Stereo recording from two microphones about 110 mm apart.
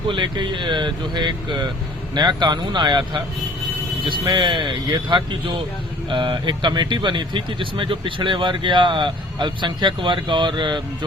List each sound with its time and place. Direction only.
0.1 s speech: 45° right (ahead or behind)